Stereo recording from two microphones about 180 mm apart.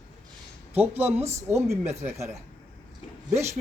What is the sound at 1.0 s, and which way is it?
A woman's voice, 15° right (ahead or behind).